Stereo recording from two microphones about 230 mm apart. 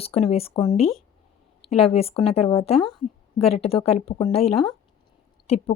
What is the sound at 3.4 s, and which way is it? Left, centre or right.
Speech, left.